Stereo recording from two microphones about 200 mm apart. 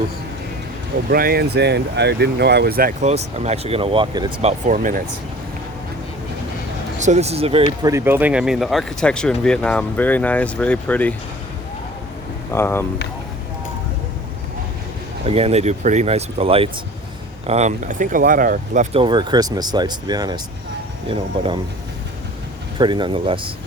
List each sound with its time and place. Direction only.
1.1 s speech: 50° right (ahead or behind); by 4.3 s 20° right (ahead or behind)
4.4 s speech: 40° right (ahead or behind)
7.0 s speech: 35° right (ahead or behind)
7.8 s speech: 15° right (ahead or behind); by 11.1 s 5° left (ahead or behind)
12.5 s speech: 10° left (ahead or behind)
15.3 s speech: 30° right (ahead or behind)
18.9 s speech: 25° right (ahead or behind)
22.8 s speech: 25° right (ahead or behind)